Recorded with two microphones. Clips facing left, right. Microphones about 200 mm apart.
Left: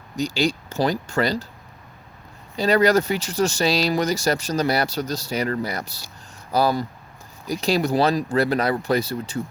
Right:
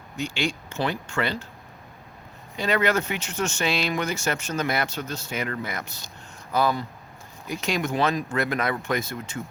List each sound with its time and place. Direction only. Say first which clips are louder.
0.2 s speech: left 6 dB; 35° left (ahead or behind)
2.6 s speech: left 6 dB; 35° left (ahead or behind)